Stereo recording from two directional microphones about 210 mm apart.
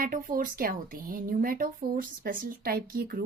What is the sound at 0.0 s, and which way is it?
Speech, 40° right (ahead or behind).